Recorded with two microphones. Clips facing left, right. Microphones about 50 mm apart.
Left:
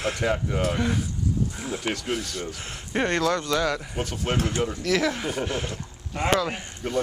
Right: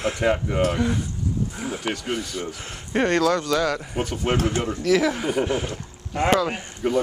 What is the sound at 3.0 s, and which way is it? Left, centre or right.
Speech, left.